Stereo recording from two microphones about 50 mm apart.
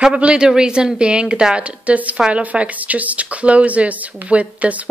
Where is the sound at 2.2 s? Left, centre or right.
Centre.